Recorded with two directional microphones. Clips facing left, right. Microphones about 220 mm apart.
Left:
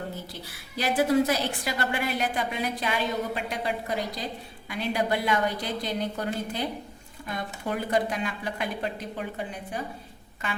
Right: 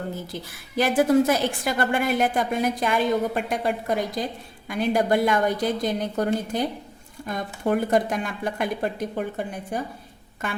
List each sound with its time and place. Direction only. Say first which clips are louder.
0.8 s a woman's voice: right 4 dB; 50° right (ahead or behind)